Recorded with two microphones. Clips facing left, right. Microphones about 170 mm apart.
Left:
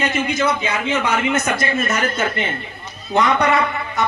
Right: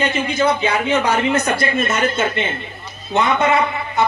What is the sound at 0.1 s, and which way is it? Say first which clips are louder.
A man's voice: right 2 dB; 30° right (ahead or behind).